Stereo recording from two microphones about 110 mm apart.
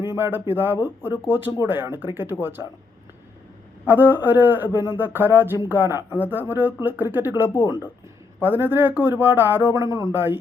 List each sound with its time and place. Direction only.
0.2 s speech: 20° right (ahead or behind)
3.8 s speech: 15° right (ahead or behind)